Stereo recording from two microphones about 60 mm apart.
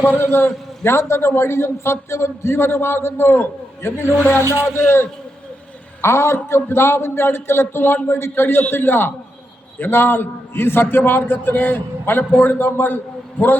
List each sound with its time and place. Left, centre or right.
0.1 s a man's voice: left